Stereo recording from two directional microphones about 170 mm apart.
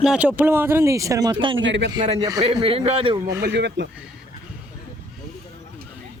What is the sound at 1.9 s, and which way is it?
A man's voice, 25° right (ahead or behind).